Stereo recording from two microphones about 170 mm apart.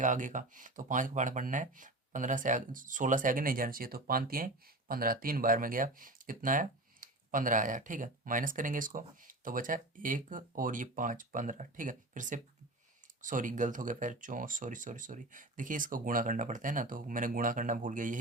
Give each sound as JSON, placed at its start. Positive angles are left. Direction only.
{"t": 0.0, "sound": "speech", "side_deg": -50}